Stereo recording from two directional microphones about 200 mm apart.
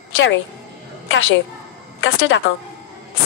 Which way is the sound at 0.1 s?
70° left (ahead or behind).